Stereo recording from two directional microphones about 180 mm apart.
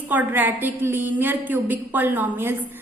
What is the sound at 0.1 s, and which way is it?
A woman's voice, 10° right (ahead or behind).